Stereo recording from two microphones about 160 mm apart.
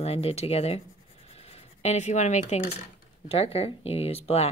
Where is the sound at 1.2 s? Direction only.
40° left (ahead or behind).